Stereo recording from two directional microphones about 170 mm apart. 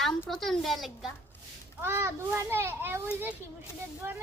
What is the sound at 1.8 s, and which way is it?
A child's voice, 15° right (ahead or behind).